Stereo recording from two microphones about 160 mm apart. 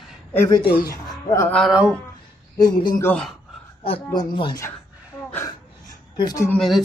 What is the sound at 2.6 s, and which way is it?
Speech, 25° left (ahead or behind).